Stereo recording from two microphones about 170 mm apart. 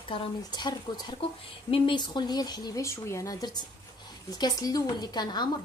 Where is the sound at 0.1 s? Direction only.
30° left (ahead or behind).